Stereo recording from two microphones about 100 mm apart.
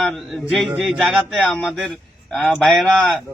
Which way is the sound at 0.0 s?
Centre (ahead or behind).